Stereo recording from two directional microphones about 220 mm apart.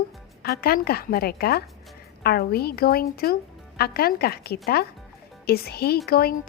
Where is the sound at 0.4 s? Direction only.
45° left (ahead or behind).